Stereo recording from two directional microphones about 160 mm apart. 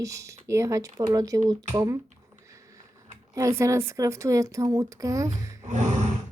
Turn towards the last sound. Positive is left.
turn(degrees=-45)  # may be behind; listen again after turning